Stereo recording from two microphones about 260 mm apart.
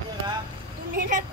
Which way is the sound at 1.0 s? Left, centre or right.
Right.